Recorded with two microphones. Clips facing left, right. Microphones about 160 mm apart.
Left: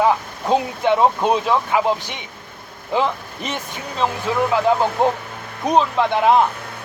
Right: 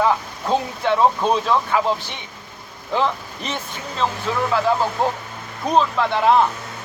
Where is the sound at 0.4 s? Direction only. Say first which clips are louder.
Left 3 dB; 15° left (ahead or behind).